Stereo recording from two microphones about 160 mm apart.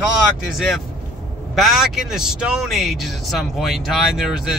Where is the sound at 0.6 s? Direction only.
Centre (ahead or behind).